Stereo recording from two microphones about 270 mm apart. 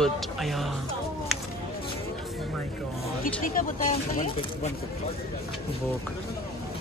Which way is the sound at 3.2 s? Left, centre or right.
Left.